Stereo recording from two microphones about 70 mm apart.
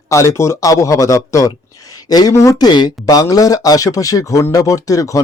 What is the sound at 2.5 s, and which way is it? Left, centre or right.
Speech, left.